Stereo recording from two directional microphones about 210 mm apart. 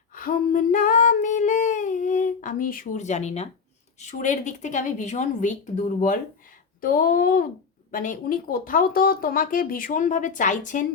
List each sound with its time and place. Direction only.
0.1 s female singing: 40° left (ahead or behind)
4.0 s speech: 35° left (ahead or behind)